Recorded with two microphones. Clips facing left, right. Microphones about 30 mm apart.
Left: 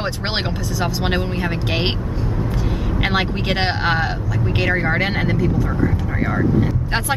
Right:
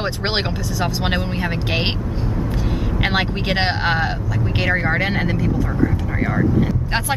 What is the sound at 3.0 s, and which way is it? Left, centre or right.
Speech, centre.